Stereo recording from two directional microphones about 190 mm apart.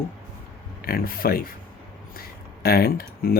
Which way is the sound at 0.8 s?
50° left (ahead or behind).